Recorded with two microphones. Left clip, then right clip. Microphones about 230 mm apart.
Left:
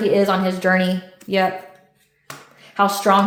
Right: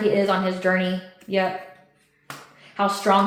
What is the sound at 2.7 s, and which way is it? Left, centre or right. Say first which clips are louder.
Speech: left 4 dB; left.